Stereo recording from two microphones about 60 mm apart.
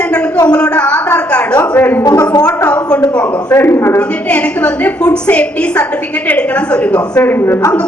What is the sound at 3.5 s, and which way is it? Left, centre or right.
Speech, left.